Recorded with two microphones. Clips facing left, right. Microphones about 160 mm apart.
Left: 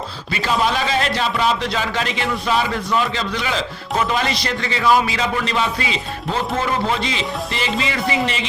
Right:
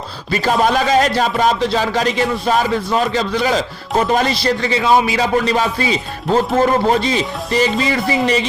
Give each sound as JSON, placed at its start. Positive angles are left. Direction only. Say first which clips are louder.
{"t": 0.3, "sound": "speech", "louder": "right 5 dB", "side_deg": -45}
{"t": 5.5, "sound": "speech", "louder": "right 5 dB", "side_deg": -40}